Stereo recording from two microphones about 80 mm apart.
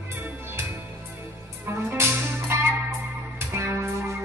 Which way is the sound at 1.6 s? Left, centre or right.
Right.